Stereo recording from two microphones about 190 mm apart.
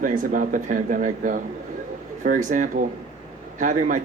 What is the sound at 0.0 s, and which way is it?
Speech, 45° right (ahead or behind).